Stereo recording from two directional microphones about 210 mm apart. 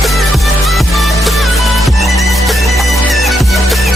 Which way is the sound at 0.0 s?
Centre (ahead or behind).